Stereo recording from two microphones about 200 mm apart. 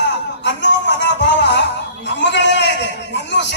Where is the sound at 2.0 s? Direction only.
60° left (ahead or behind).